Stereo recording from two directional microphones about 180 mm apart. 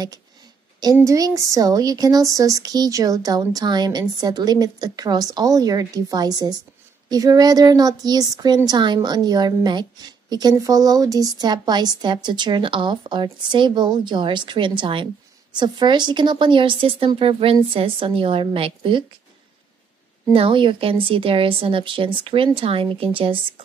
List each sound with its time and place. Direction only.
1.0 s a woman's voice: 20° right (ahead or behind)
20.3 s a woman's voice: 30° right (ahead or behind)